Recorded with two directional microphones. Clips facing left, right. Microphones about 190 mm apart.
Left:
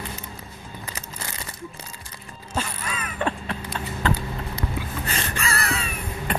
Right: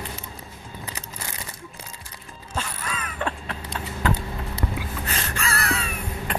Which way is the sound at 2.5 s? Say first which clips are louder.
Left 2 dB; 10° left (ahead or behind).